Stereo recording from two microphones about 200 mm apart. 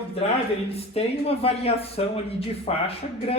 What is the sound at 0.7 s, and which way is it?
Speech, 30° left (ahead or behind).